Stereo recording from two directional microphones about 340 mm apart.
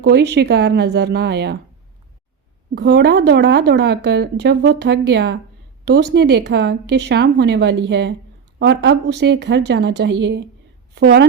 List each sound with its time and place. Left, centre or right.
0.0 s a woman's voice: right
2.7 s a woman's voice: right